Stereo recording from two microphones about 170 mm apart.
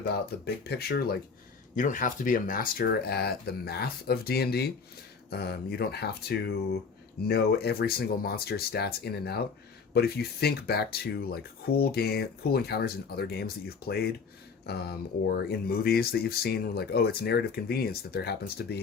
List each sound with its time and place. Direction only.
0.0 s speech: 70° left (ahead or behind)
1.7 s speech: 50° left (ahead or behind); by 18.8 s 70° left (ahead or behind)